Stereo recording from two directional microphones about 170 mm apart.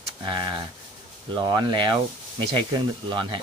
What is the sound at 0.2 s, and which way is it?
Speech, 30° right (ahead or behind).